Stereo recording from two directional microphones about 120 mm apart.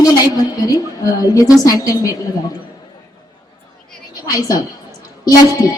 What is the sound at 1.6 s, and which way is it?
Speech, 30° left (ahead or behind).